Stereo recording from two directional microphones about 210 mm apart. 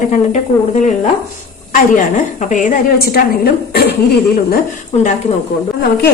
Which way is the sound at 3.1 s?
45° left (ahead or behind).